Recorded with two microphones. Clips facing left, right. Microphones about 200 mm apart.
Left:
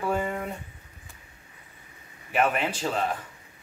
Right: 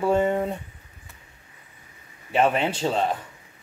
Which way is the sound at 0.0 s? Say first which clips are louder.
Right 7 dB; 25° right (ahead or behind).